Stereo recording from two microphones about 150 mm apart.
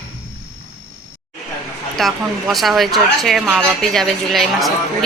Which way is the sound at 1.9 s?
Centre (ahead or behind).